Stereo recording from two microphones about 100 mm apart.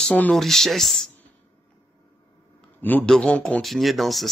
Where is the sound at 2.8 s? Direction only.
15° left (ahead or behind); by 4.3 s centre (ahead or behind).